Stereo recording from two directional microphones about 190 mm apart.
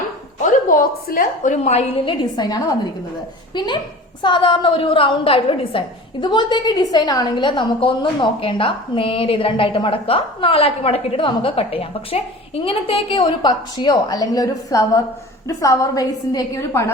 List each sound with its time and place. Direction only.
0.3 s a woman's voice: 50° left (ahead or behind)
2.3 s a woman's voice: 20° left (ahead or behind)
4.2 s a woman's voice: 25° left (ahead or behind)